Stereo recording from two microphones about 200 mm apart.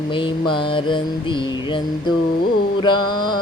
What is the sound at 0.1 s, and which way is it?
Mantra, 25° left (ahead or behind).